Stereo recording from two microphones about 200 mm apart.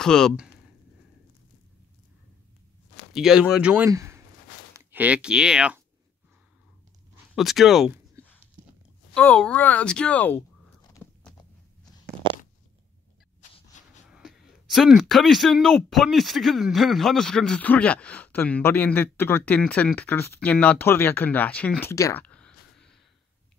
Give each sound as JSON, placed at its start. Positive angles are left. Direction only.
{"t": 0.0, "sound": "speech", "side_deg": 5}
{"t": 3.1, "sound": "speech", "side_deg": 0}
{"t": 7.3, "sound": "speech", "side_deg": 0}
{"t": 10.9, "sound": "biting", "side_deg": 10}
{"t": 13.4, "sound": "a sound", "side_deg": 40}
{"t": 14.0, "sound": "speech", "side_deg": -5}